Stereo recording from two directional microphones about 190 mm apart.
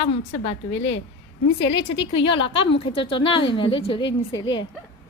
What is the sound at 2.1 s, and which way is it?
A woman's voice, 25° left (ahead or behind).